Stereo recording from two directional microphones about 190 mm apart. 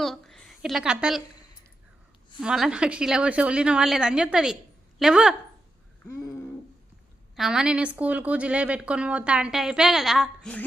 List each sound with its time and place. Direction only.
0.0 s a woman's voice: centre (ahead or behind)
2.4 s speech: 5° right (ahead or behind)
6.1 s a sound: 15° left (ahead or behind)
7.3 s speech: 5° right (ahead or behind)